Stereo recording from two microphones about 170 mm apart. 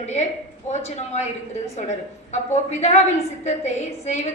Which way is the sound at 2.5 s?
40° left (ahead or behind).